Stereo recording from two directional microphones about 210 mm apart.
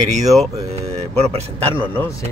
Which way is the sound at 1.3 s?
25° right (ahead or behind).